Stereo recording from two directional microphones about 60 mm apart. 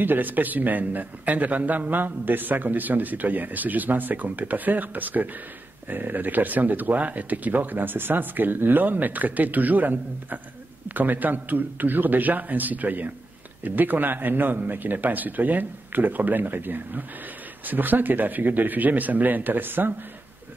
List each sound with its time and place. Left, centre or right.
0.0 s a man's voice: right